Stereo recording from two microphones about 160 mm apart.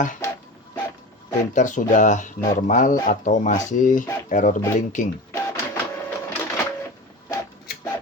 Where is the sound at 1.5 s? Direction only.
50° left (ahead or behind).